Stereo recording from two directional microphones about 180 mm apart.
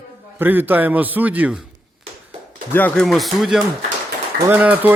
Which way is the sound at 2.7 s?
10° left (ahead or behind).